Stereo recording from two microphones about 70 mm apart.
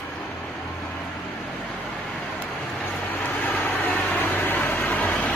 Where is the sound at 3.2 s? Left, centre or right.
Left.